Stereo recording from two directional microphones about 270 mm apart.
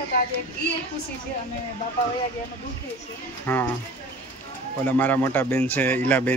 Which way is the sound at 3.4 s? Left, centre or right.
Centre.